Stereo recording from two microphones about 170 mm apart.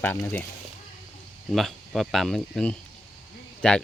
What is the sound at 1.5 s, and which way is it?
Speech, centre (ahead or behind).